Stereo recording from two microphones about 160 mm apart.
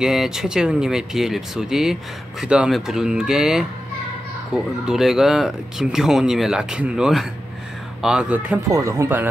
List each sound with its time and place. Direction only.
0.0 s speech: 5° right (ahead or behind)
8.6 s speech: 20° right (ahead or behind)